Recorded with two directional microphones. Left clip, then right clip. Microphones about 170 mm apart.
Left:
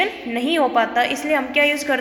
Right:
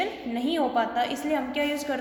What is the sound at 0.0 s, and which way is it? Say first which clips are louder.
A woman's voice: left 7 dB; 25° left (ahead or behind).